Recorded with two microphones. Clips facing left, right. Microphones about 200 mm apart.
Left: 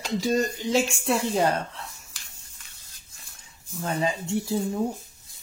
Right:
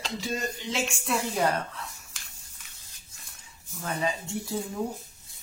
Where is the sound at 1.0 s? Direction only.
30° left (ahead or behind).